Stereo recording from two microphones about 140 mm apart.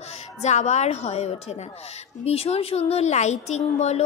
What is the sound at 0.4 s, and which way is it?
Speech, 55° left (ahead or behind).